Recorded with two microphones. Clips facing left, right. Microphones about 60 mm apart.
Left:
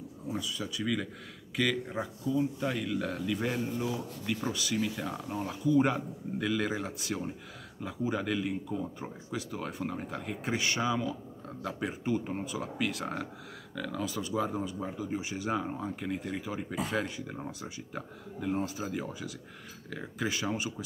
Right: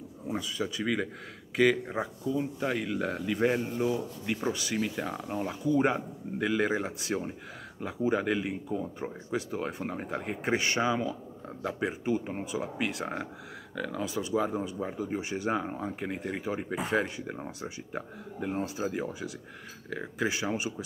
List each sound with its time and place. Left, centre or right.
0.3 s speech: right